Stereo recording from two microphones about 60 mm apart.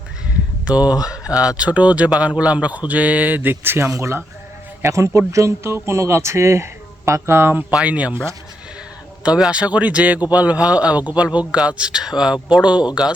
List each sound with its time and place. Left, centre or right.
0.6 s speech: right
0.9 s speech: left
1.1 s a man's voice: centre; by 3.9 s right
3.9 s speech: right
7.7 s a man's voice: right
8.1 s speech: right
9.2 s a man's voice: centre